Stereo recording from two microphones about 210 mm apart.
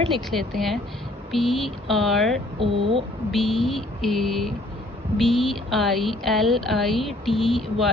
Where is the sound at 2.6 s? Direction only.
25° right (ahead or behind).